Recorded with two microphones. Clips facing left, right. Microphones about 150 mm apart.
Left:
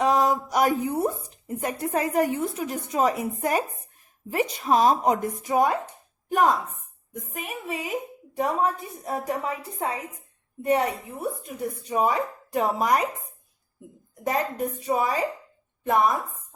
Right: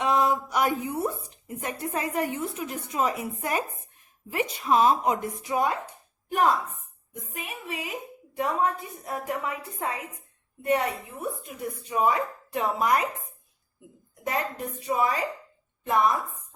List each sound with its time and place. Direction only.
0.0 s a woman's voice: 40° left (ahead or behind)
4.3 s speech: 40° left (ahead or behind)
14.3 s a woman's voice: 45° left (ahead or behind)